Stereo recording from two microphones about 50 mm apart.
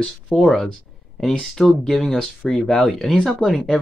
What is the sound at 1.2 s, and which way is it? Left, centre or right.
Speech, centre.